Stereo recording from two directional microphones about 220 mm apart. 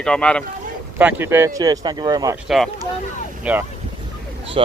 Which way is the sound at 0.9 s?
10° right (ahead or behind).